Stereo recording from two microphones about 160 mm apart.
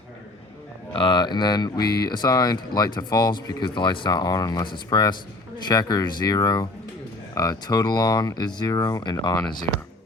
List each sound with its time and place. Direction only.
0.9 s speech: 30° left (ahead or behind)